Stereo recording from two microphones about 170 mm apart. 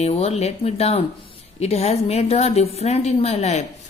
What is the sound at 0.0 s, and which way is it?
A woman's voice, 35° left (ahead or behind).